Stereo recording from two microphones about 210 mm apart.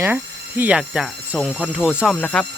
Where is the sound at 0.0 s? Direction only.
10° right (ahead or behind).